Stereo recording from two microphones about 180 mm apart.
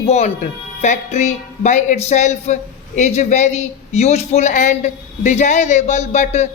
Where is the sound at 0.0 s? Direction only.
35° left (ahead or behind).